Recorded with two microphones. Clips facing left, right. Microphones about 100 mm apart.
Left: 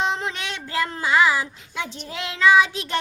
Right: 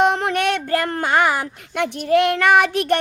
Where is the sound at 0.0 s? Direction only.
60° right (ahead or behind).